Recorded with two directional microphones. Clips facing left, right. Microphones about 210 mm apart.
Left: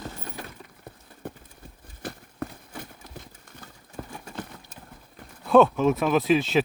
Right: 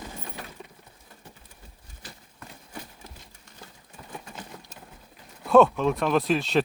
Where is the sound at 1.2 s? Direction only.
55° left (ahead or behind).